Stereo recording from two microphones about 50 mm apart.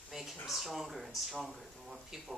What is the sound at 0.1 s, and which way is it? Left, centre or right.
Speech, centre.